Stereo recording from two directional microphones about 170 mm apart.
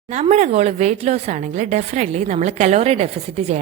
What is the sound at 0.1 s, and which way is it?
A woman's voice, 40° right (ahead or behind).